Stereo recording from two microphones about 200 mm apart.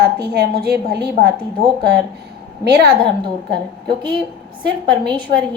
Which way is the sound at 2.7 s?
55° right (ahead or behind).